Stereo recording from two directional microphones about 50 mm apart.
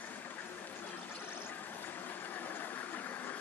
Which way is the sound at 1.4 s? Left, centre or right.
Left.